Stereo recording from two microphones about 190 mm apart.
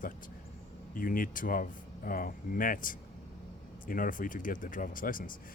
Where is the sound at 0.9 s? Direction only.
45° left (ahead or behind).